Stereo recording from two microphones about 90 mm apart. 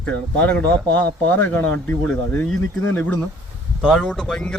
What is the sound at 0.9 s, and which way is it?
Speech, 20° left (ahead or behind).